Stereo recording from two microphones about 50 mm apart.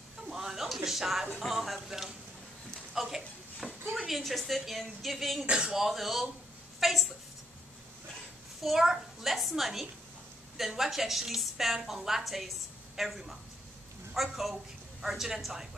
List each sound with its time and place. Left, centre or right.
0.3 s a sound: centre
0.8 s a woman's voice: centre
2.9 s a sound: centre
3.9 s a woman's voice: centre
5.5 s speech: centre
5.8 s a woman's voice: centre
8.6 s a woman's voice: centre